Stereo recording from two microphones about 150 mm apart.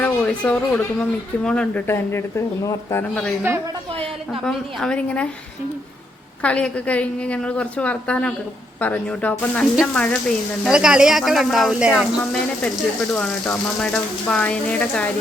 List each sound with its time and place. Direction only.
0.0 s speech: 10° left (ahead or behind)
4.4 s speech: 5° left (ahead or behind)
6.4 s speech: 10° left (ahead or behind)
10.6 s speech: 5° right (ahead or behind)